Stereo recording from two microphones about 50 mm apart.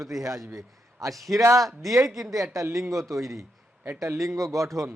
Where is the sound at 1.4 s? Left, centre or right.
Right.